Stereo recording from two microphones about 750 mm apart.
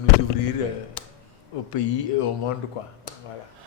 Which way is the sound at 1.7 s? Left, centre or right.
Left.